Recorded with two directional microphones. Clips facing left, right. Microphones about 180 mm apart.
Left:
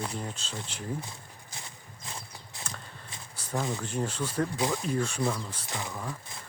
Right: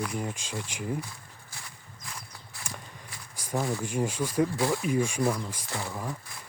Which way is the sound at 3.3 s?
10° right (ahead or behind).